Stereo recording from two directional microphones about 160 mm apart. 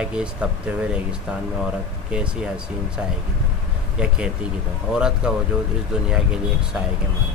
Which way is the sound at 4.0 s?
5° right (ahead or behind).